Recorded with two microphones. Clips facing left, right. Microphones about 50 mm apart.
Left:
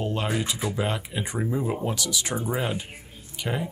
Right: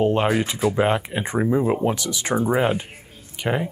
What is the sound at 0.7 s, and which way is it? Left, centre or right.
Speech, right.